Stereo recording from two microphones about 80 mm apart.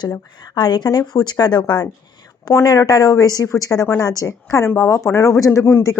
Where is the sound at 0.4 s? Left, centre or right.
Left.